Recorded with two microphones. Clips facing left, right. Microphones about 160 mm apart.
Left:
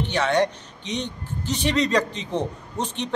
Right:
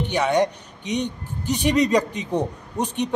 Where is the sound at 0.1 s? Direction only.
15° right (ahead or behind).